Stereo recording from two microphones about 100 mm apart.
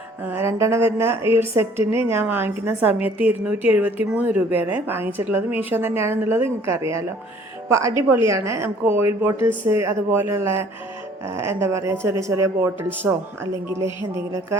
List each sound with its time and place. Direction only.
0.3 s a woman's voice: 30° right (ahead or behind)